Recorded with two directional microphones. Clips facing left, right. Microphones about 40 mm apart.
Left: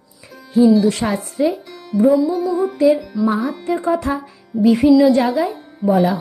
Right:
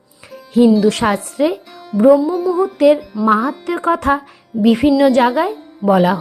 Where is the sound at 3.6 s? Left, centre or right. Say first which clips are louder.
Right 3 dB; right.